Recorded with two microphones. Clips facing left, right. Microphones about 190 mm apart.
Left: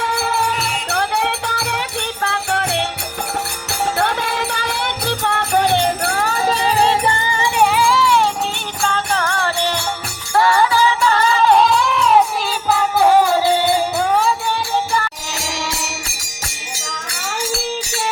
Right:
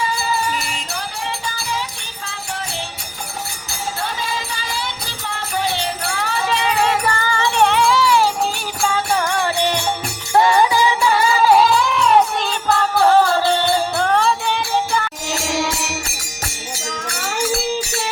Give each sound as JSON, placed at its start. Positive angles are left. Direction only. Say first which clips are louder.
{"t": 0.0, "sound": "music", "louder": "left 2 dB", "side_deg": 65}